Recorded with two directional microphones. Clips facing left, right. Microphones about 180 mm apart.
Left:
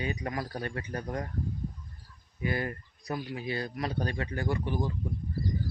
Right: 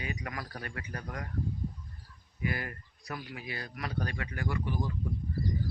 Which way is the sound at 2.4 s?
30° left (ahead or behind).